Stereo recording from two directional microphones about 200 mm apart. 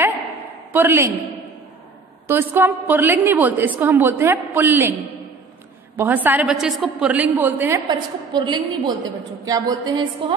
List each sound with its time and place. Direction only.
0.7 s a woman's voice: 10° right (ahead or behind)
2.2 s a woman's voice: 10° right (ahead or behind)
5.9 s a woman's voice: 10° right (ahead or behind)
7.9 s a woman's voice: 20° right (ahead or behind)